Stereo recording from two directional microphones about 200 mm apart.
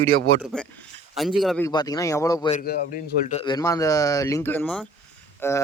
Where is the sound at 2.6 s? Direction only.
50° left (ahead or behind).